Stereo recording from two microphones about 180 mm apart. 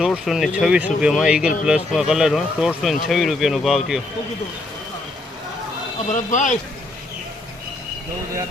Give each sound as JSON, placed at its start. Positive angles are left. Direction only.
{"t": 0.0, "sound": "speech", "side_deg": -5}
{"t": 6.1, "sound": "speech", "side_deg": 40}